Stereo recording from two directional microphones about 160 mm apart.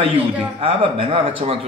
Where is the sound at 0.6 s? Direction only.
35° right (ahead or behind).